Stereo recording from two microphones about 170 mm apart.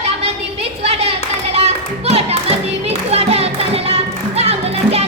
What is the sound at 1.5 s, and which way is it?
Music, 40° right (ahead or behind).